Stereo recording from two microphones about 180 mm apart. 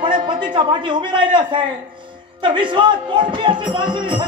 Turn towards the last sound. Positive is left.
turn(degrees=-25)  # may be behind; listen again after turning